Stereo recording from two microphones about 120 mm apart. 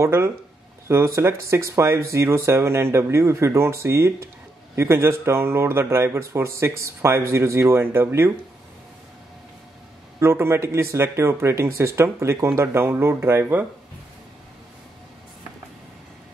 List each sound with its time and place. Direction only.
0.0 s speech: 20° right (ahead or behind)
10.2 s speech: 20° right (ahead or behind)